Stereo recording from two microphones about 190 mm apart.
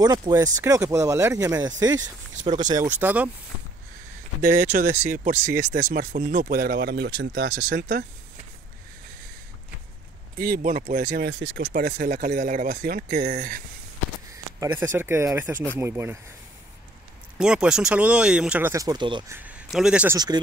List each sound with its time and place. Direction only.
0.0 s speech: 20° right (ahead or behind)
2.7 s speech: 10° right (ahead or behind)
4.4 s speech: 50° right (ahead or behind)
5.6 s speech: 50° right (ahead or behind)
10.3 s speech: 50° right (ahead or behind)
14.6 s speech: 10° right (ahead or behind)
17.4 s speech: 5° right (ahead or behind); by 19.3 s 25° right (ahead or behind)
19.3 s speech: 5° right (ahead or behind)